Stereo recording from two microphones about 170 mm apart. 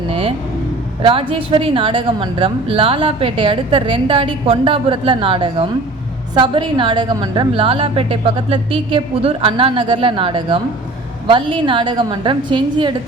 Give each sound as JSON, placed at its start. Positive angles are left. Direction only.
{"t": 0.1, "sound": "vehicle", "side_deg": -35}
{"t": 1.0, "sound": "a woman's voice", "side_deg": -30}